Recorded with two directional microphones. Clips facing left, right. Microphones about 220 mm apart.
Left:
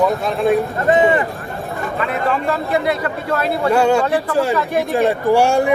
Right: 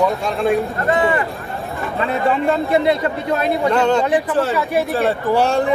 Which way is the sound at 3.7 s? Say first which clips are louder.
Left 3 dB; 10° left (ahead or behind).